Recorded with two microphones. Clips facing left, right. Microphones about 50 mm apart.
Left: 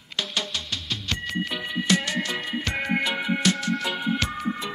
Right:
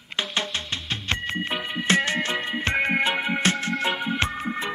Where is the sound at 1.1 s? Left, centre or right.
Right.